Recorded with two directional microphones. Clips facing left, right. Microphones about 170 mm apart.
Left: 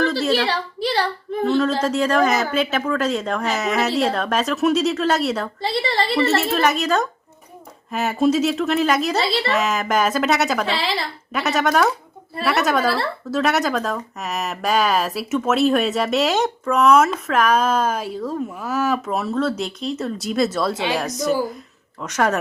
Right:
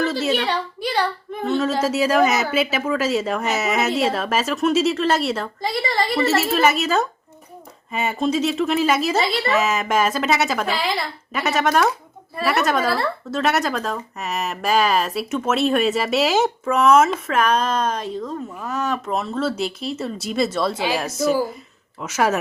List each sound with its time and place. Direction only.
0.0 s a sound: 5° right (ahead or behind)
0.8 s child singing: 35° left (ahead or behind)
1.5 s speech: 5° right (ahead or behind)
10.7 s speech: 30° left (ahead or behind)
11.3 s speech: centre (ahead or behind)